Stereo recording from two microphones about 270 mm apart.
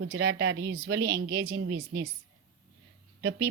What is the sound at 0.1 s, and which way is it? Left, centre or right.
Speech, right.